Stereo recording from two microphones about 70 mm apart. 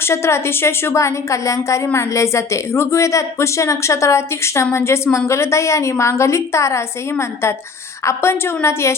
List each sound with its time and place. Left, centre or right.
0.0 s a woman's voice: left